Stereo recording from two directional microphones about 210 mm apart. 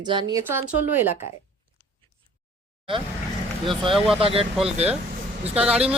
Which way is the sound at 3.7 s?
25° right (ahead or behind).